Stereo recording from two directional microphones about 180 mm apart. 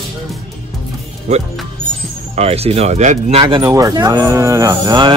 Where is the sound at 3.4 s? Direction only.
20° right (ahead or behind).